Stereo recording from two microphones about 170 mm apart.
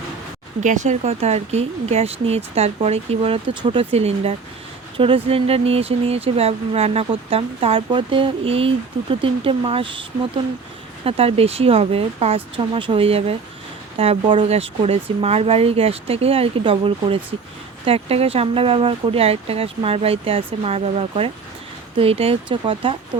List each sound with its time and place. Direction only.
0.6 s speech: 45° right (ahead or behind)